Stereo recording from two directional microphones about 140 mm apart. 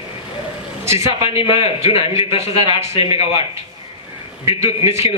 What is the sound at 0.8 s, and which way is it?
Speech, 20° right (ahead or behind).